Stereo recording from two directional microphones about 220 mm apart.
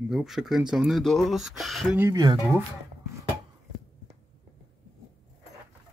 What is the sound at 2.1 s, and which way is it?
Speech, 15° right (ahead or behind).